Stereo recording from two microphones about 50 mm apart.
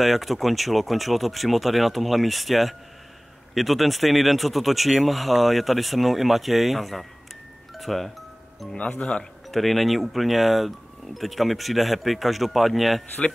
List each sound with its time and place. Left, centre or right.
0.0 s speech: centre
7.7 s music: centre
8.7 s speech: left
9.5 s speech: centre